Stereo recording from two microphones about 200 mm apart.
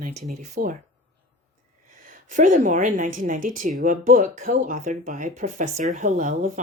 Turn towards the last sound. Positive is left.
turn(degrees=-40)  # may be behind; listen again after turning